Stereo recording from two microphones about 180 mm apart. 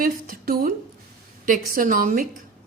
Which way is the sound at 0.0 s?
50° right (ahead or behind).